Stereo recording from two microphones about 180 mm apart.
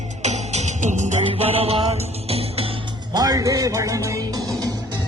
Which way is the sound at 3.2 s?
20° right (ahead or behind).